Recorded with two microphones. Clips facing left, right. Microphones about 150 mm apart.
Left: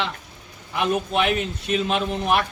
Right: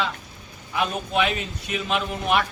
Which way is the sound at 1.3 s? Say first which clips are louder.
Left 5 dB; 65° left (ahead or behind).